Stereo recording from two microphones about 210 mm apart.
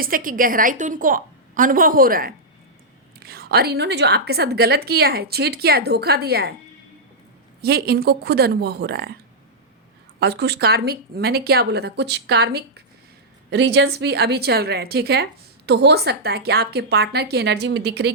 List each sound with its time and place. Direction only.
0.0 s a woman's voice: 40° right (ahead or behind)
7.6 s a woman's voice: 50° right (ahead or behind)
10.2 s a woman's voice: 50° right (ahead or behind)